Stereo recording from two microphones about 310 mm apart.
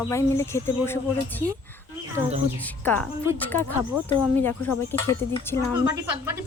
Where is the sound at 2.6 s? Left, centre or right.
Centre.